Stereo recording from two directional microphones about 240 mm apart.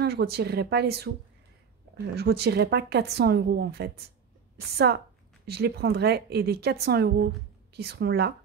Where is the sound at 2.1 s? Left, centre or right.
Right.